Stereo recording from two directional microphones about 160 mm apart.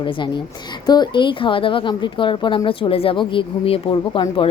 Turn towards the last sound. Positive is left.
turn(degrees=30)  # may be behind; listen again after turning